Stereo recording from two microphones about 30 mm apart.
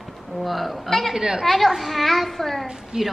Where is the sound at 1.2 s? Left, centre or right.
Right.